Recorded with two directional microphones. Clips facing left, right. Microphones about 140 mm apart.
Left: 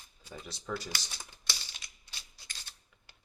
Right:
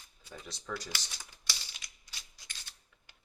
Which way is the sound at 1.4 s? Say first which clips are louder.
Left 1 dB; 30° left (ahead or behind).